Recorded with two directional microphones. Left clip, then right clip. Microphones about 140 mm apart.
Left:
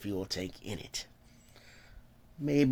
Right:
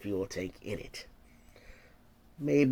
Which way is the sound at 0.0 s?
30° left (ahead or behind).